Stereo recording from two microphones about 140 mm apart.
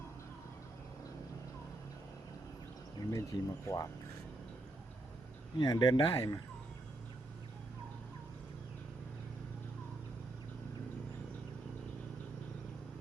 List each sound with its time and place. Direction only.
3.1 s speech: 25° left (ahead or behind)
5.5 s speech: 25° left (ahead or behind)